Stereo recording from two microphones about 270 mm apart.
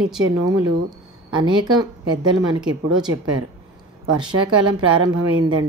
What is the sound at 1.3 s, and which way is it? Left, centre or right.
A woman's voice, centre.